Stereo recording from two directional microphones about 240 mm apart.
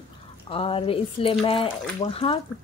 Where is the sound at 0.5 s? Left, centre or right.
Left.